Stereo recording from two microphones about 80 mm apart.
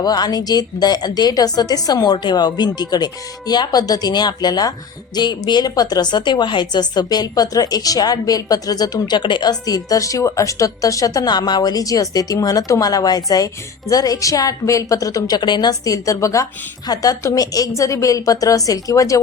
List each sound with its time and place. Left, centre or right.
0.0 s a woman's voice: left
9.5 s a woman's voice: left